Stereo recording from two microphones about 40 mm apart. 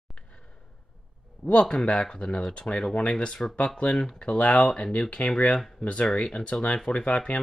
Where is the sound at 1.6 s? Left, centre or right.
Centre.